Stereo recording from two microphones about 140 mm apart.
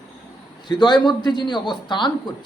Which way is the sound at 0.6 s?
30° left (ahead or behind).